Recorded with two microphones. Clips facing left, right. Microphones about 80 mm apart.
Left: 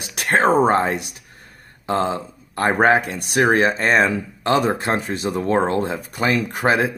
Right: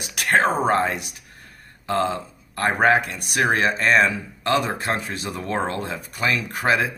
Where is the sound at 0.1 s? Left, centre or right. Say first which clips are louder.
Left 3 dB; left.